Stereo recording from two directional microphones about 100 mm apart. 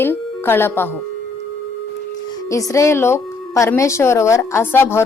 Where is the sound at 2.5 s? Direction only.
30° left (ahead or behind).